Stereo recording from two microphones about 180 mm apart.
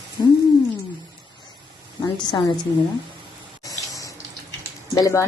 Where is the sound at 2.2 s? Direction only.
25° left (ahead or behind).